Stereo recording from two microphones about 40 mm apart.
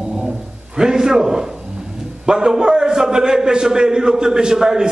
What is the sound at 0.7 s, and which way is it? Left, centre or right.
A man's voice, centre.